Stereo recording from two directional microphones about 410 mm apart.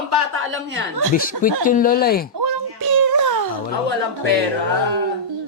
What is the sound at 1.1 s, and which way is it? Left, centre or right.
Speech, centre.